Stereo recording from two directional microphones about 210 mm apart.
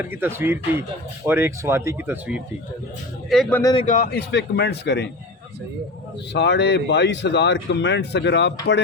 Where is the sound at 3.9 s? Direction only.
45° left (ahead or behind).